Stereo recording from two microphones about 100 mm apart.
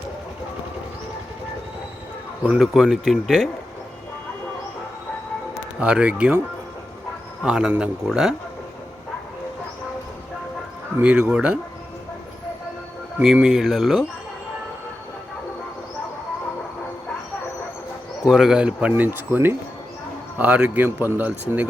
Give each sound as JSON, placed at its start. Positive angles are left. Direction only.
{"t": 2.4, "sound": "speech", "side_deg": -10}
{"t": 5.8, "sound": "speech", "side_deg": -10}
{"t": 7.4, "sound": "speech", "side_deg": -10}
{"t": 11.0, "sound": "speech", "side_deg": -10}
{"t": 13.2, "sound": "speech", "side_deg": -5}
{"t": 18.3, "sound": "speech", "side_deg": -5}